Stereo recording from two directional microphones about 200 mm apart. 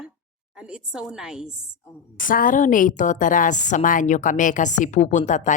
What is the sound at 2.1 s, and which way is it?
A woman's voice, 45° left (ahead or behind).